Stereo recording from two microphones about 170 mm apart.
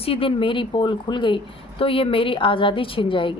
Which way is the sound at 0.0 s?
35° left (ahead or behind).